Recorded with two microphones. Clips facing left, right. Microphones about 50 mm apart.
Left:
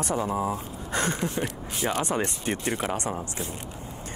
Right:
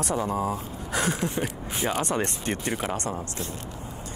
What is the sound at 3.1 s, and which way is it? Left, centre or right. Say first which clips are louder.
Speech: even; centre.